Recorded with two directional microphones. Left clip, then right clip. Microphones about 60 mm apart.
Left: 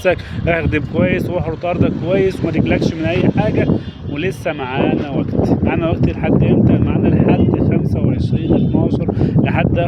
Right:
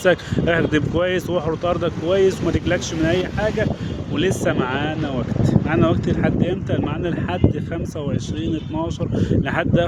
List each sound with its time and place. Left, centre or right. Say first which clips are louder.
0.0 s speech: left 1 dB; centre
4.2 s speech: even; right
5.4 s speech: left 2 dB; centre
9.2 s speech: left 2 dB; right